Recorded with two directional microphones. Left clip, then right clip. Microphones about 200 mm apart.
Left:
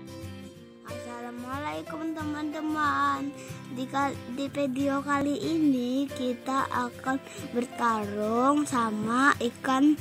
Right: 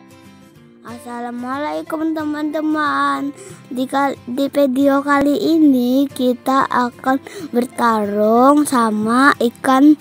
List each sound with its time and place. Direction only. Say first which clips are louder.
0.8 s a child's voice: right 10 dB; 40° right (ahead or behind)